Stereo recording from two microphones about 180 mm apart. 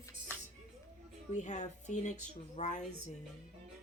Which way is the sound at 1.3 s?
40° left (ahead or behind).